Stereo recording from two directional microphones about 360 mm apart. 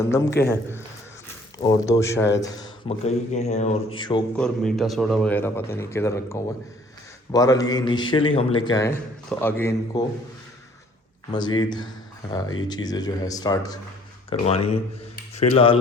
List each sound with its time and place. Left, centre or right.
0.0 s a man's voice: centre
1.5 s a man's voice: centre
4.4 s a man's voice: centre
11.3 s a man's voice: centre
15.1 s tick-tock: centre